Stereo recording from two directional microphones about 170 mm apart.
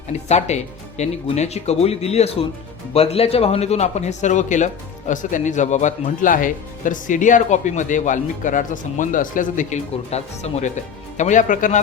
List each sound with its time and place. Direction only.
0.1 s a man's voice: 40° left (ahead or behind)